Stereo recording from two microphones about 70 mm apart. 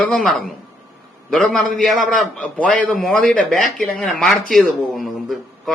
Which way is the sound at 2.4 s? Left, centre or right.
Centre.